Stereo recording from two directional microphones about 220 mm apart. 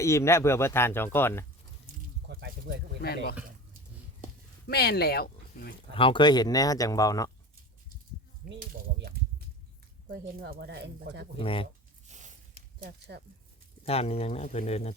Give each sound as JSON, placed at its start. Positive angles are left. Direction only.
{"t": 0.0, "sound": "speech", "side_deg": 15}
{"t": 2.2, "sound": "squish", "side_deg": -45}
{"t": 3.0, "sound": "speech", "side_deg": 45}
{"t": 4.6, "sound": "speech", "side_deg": 45}
{"t": 5.9, "sound": "speech", "side_deg": 25}
{"t": 8.5, "sound": "a sound", "side_deg": -45}
{"t": 10.1, "sound": "speech", "side_deg": -45}
{"t": 11.3, "sound": "speech", "side_deg": 25}
{"t": 12.0, "sound": "zipper", "side_deg": -35}
{"t": 12.8, "sound": "speech", "side_deg": -45}
{"t": 13.8, "sound": "speech", "side_deg": 25}